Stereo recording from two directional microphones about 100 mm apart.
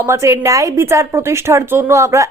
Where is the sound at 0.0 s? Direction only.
30° right (ahead or behind).